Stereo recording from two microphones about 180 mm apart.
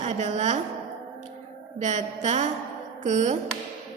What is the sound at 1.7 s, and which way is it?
A woman's voice, 40° right (ahead or behind).